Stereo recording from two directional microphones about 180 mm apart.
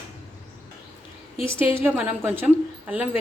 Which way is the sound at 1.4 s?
30° left (ahead or behind).